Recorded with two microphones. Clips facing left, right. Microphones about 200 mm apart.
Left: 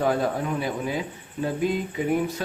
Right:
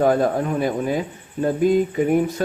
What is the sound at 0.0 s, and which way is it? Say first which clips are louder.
A man's voice: right 6 dB; 45° right (ahead or behind).